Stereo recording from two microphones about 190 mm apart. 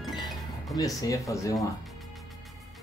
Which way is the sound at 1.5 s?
Centre (ahead or behind).